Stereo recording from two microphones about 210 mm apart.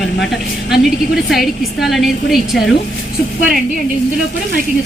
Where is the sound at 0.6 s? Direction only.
55° left (ahead or behind).